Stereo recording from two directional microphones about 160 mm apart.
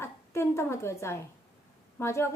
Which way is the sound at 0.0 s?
15° left (ahead or behind).